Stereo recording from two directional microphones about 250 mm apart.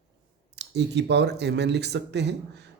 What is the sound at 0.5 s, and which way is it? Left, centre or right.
Speech, right.